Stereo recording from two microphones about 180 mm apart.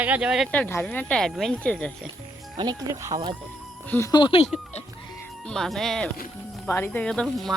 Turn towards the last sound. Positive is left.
turn(degrees=5)  # may be behind; listen again after turning